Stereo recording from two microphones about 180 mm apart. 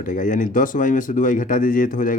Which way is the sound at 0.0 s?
45° left (ahead or behind).